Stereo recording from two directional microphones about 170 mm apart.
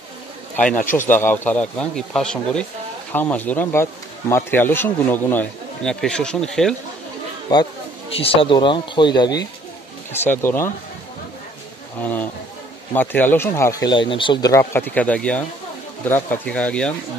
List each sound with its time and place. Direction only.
0.6 s speech: 10° left (ahead or behind)
8.2 s speech: 30° left (ahead or behind)
10.2 s speech: 15° left (ahead or behind)
12.0 s speech: 10° left (ahead or behind)